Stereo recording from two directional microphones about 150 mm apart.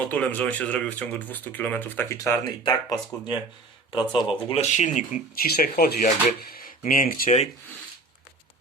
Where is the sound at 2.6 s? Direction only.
30° left (ahead or behind); by 5.2 s 55° left (ahead or behind).